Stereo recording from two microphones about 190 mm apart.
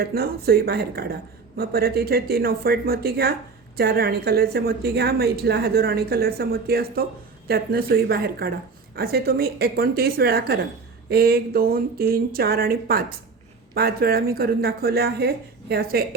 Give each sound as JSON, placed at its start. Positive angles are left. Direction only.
{"t": 0.0, "sound": "a woman's voice", "side_deg": -55}